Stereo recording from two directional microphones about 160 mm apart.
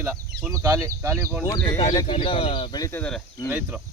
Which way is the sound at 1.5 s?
20° left (ahead or behind).